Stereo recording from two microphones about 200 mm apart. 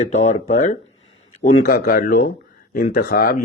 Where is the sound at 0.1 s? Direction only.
35° left (ahead or behind).